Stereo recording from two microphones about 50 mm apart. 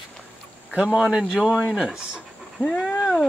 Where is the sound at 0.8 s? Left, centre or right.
Centre.